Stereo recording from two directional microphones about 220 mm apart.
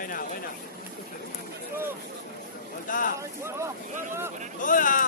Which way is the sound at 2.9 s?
40° left (ahead or behind).